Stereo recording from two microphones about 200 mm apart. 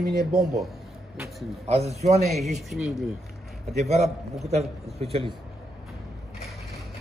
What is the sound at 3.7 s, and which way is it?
A man's voice, 35° right (ahead or behind).